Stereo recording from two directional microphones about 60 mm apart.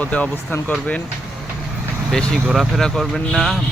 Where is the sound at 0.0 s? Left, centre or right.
Left.